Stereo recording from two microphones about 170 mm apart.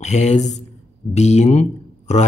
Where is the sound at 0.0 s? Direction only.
40° left (ahead or behind).